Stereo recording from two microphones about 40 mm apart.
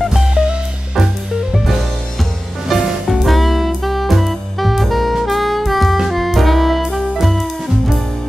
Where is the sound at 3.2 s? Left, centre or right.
Centre.